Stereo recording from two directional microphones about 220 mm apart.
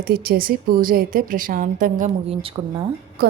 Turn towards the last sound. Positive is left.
turn(degrees=-45)  # may be behind; listen again after turning